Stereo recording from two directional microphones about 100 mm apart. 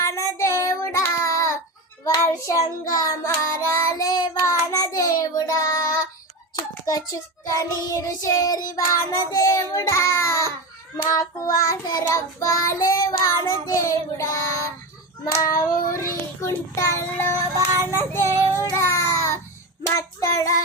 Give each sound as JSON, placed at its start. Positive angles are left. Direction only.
{"t": 0.0, "sound": "child singing", "side_deg": 30}